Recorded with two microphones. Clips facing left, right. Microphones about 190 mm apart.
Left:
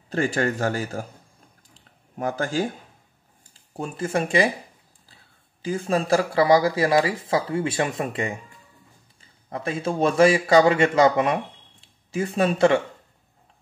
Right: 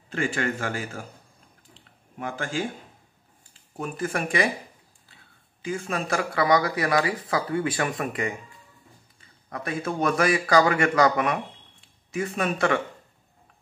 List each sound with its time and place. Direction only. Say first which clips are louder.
0.1 s speech: left 4 dB; 40° left (ahead or behind)
1.7 s a sound: right 2 dB; 40° left (ahead or behind)
3.7 s speech: left 3 dB; 30° left (ahead or behind)
9.5 s speech: left 3 dB; 25° left (ahead or behind)